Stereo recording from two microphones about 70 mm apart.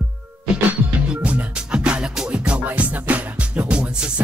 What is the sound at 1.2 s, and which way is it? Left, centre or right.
Music, centre.